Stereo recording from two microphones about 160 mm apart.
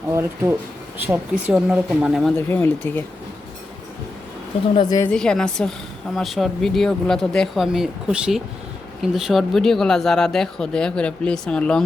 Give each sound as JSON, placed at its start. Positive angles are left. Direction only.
{"t": 0.1, "sound": "speech", "side_deg": -15}
{"t": 2.5, "sound": "speech", "side_deg": 15}
{"t": 4.7, "sound": "a woman's voice", "side_deg": 30}
{"t": 5.1, "sound": "speech", "side_deg": 5}